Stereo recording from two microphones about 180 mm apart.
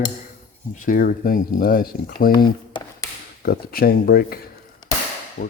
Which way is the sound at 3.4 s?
60° left (ahead or behind).